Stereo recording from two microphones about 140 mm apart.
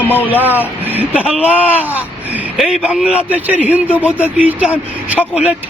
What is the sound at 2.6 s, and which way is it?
A woman's voice, 5° right (ahead or behind).